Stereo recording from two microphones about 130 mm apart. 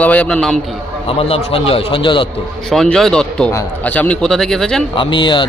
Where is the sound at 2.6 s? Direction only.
5° left (ahead or behind).